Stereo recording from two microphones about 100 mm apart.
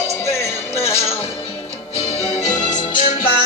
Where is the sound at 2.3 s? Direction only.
40° left (ahead or behind).